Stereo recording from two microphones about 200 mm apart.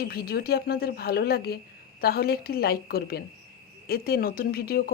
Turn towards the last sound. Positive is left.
turn(degrees=50)  # may be behind; listen again after turning